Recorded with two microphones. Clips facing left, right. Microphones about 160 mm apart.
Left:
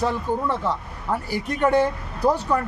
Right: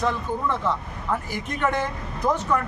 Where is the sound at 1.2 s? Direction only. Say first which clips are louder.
Left 4 dB; 35° left (ahead or behind).